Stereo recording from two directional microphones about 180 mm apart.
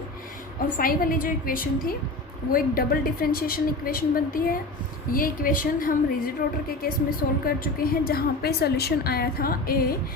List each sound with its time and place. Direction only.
0.8 s a woman's voice: 50° left (ahead or behind)